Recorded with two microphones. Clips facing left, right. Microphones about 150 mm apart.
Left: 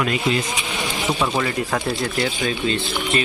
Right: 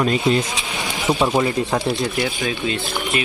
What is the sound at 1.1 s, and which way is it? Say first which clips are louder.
Speech: right 5 dB; 20° right (ahead or behind).